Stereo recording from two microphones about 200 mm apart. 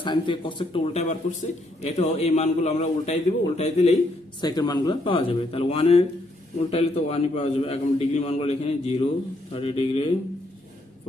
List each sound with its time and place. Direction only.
0.0 s a man's voice: 25° left (ahead or behind)
4.4 s a man's voice: 20° left (ahead or behind)